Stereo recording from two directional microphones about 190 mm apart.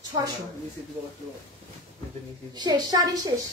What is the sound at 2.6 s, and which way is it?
Speech, 20° right (ahead or behind).